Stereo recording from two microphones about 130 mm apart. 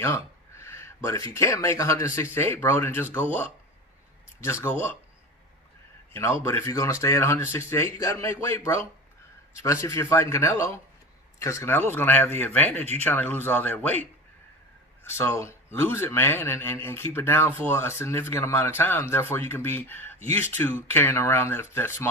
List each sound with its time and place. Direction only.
0.0 s speech: 20° left (ahead or behind)
6.1 s speech: 20° left (ahead or behind)
15.0 s speech: 20° left (ahead or behind)